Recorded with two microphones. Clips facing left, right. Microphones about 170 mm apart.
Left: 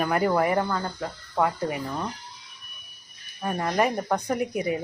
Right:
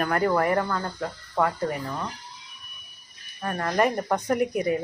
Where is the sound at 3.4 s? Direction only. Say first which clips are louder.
Even; 10° left (ahead or behind).